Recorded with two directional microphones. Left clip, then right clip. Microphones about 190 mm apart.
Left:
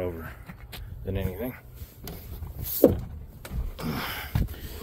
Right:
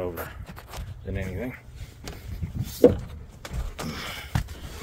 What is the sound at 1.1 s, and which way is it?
Speech, 20° left (ahead or behind).